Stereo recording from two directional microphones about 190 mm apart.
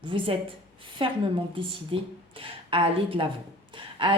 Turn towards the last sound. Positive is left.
turn(degrees=-25)  # may be behind; listen again after turning